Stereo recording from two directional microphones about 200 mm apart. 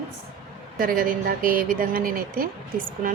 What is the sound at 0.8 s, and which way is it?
Speech, 45° right (ahead or behind).